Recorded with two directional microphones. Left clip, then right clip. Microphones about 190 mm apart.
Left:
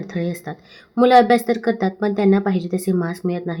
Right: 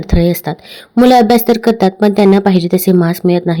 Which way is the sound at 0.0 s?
45° right (ahead or behind).